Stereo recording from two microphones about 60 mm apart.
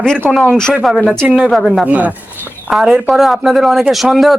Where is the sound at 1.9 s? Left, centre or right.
Right.